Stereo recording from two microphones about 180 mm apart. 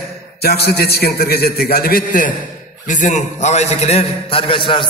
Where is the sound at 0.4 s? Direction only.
60° left (ahead or behind).